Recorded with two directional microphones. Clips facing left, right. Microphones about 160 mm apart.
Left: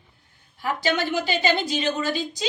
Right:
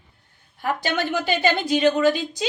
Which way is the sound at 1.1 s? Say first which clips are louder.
Right 1 dB; 50° right (ahead or behind).